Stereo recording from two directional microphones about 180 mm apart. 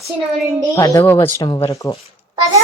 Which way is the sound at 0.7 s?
15° left (ahead or behind).